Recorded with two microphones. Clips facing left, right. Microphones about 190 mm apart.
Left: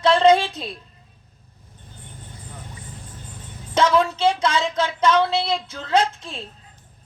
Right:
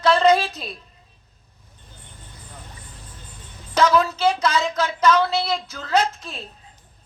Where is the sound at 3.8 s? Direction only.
30° left (ahead or behind).